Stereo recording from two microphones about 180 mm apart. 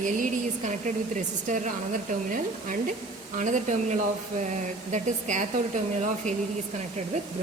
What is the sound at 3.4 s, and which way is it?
Speech, 45° right (ahead or behind).